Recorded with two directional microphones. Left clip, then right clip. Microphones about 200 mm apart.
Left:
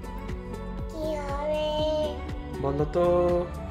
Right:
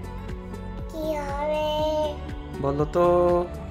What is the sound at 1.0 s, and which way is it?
Child singing, 15° right (ahead or behind).